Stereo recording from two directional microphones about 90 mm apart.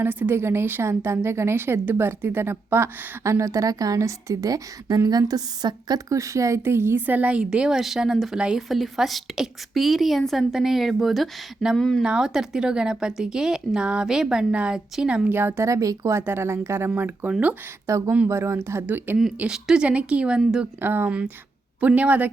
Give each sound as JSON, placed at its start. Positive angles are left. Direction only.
{"t": 0.0, "sound": "a woman's voice", "side_deg": -25}
{"t": 15.3, "sound": "a woman's voice", "side_deg": -25}
{"t": 17.8, "sound": "a woman's voice", "side_deg": -35}
{"t": 19.4, "sound": "speech", "side_deg": -10}
{"t": 20.8, "sound": "a woman's voice", "side_deg": -25}